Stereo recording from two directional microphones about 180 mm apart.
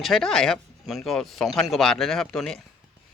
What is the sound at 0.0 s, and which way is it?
Speech, centre (ahead or behind).